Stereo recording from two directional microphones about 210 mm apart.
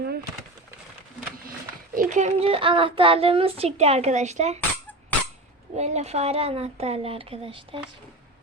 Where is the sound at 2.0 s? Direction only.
35° right (ahead or behind).